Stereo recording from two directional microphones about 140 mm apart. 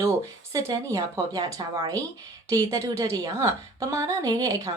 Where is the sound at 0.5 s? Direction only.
25° right (ahead or behind).